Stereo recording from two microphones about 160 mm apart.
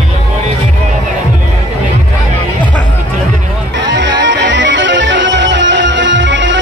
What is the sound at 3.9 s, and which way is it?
Music, 90° right.